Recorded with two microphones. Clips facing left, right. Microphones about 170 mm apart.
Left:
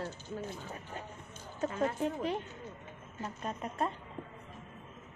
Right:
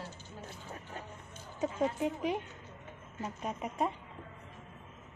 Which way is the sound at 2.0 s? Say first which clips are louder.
Even; 15° right (ahead or behind).